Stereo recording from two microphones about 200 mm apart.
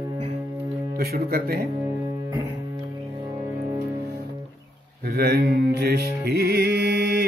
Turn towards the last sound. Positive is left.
turn(degrees=-55)  # may be behind; listen again after turning